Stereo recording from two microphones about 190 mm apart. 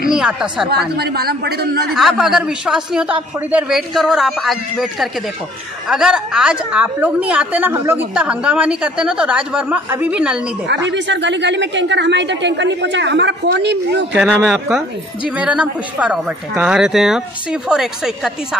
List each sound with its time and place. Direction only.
0.1 s speech: 5° right (ahead or behind)
0.7 s speech: 55° right (ahead or behind)
2.0 s a woman's voice: centre (ahead or behind)
10.9 s a woman's voice: 70° right (ahead or behind)
14.1 s speech: centre (ahead or behind)